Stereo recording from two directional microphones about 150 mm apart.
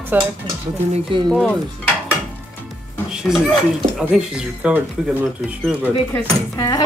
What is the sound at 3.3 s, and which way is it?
A woman's voice, centre (ahead or behind).